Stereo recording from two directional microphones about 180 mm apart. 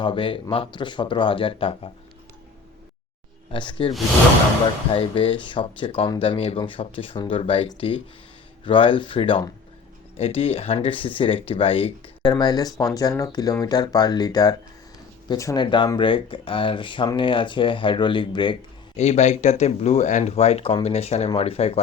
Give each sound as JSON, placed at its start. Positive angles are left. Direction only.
{"t": 0.0, "sound": "speech", "side_deg": 30}
{"t": 3.5, "sound": "speech", "side_deg": 25}
{"t": 18.9, "sound": "speech", "side_deg": 40}